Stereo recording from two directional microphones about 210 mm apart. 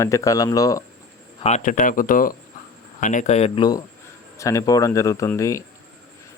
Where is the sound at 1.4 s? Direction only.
35° left (ahead or behind).